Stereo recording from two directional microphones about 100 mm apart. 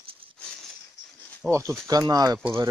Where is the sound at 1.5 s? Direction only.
30° right (ahead or behind).